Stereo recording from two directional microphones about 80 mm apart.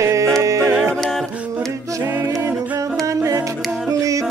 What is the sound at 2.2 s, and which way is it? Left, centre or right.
A capella, right.